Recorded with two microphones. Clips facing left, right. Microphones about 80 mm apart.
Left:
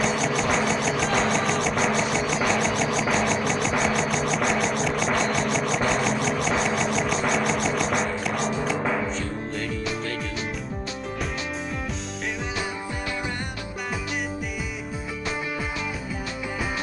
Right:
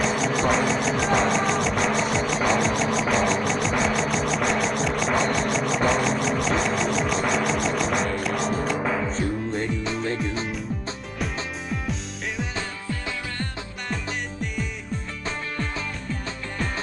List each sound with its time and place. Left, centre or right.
0.0 s music: centre
9.2 s music: right